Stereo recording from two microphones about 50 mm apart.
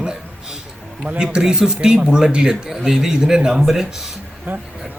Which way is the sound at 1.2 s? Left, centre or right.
Centre.